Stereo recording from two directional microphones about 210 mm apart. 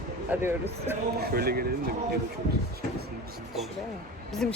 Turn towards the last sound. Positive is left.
turn(degrees=5)  # may be behind; listen again after turning